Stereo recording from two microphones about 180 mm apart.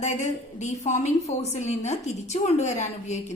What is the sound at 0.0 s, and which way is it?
A woman's voice, 40° left (ahead or behind).